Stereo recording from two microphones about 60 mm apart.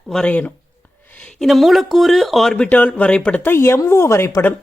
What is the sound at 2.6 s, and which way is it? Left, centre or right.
Speech, left.